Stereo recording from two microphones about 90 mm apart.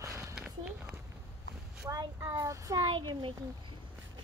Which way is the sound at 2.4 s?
40° right (ahead or behind).